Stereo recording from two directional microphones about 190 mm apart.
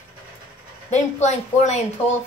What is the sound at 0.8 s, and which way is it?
Speech, 35° left (ahead or behind).